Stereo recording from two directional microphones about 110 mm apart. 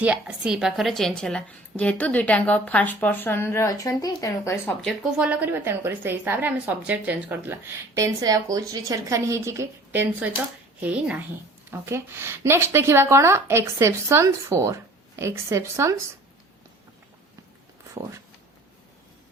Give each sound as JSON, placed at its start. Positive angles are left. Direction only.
{"t": 0.0, "sound": "a woman's voice", "side_deg": -10}
{"t": 5.1, "sound": "a woman's voice", "side_deg": -10}
{"t": 11.7, "sound": "a woman's voice", "side_deg": -20}